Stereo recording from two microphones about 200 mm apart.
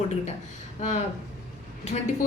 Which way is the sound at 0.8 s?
40° left (ahead or behind).